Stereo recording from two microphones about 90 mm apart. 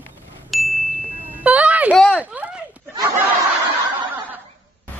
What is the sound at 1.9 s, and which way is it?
Speech, 10° left (ahead or behind).